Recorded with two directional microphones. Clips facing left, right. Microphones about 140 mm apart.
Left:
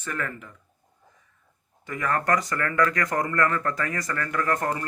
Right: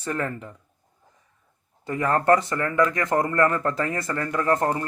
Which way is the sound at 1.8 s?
30° right (ahead or behind).